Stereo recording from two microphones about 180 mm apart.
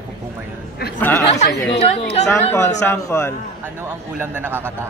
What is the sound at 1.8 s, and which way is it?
Speech, 35° left (ahead or behind).